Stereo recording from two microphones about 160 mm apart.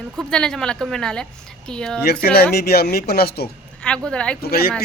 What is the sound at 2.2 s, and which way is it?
Speech, 80° left.